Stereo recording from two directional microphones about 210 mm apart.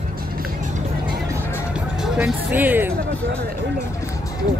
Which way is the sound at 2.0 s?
Centre (ahead or behind).